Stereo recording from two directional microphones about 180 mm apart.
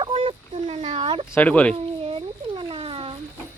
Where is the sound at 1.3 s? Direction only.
10° left (ahead or behind).